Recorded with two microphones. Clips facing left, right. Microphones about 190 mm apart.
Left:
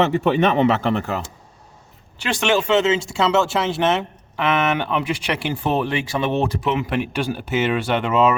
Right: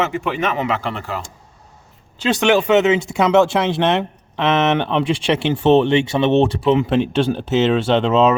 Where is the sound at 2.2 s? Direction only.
20° right (ahead or behind).